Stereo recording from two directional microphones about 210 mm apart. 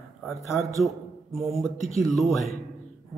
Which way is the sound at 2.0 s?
Centre (ahead or behind).